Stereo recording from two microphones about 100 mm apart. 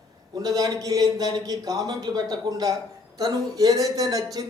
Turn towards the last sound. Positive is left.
turn(degrees=-40)  # may be behind; listen again after turning